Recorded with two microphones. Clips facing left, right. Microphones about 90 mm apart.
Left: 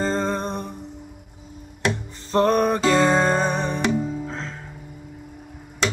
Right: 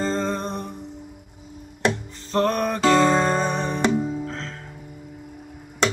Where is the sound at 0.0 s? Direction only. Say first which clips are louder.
Left 1 dB; 15° left (ahead or behind).